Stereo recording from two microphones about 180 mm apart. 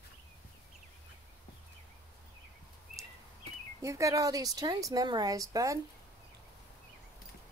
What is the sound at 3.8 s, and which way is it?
A woman's voice, 15° right (ahead or behind).